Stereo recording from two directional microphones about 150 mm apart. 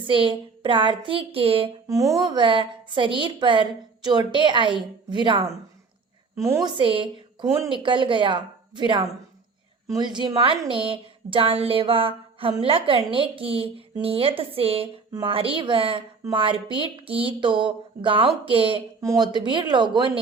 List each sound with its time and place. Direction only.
0.1 s a woman's voice: 35° right (ahead or behind)
1.9 s a woman's voice: 20° right (ahead or behind)
6.3 s a woman's voice: 20° right (ahead or behind)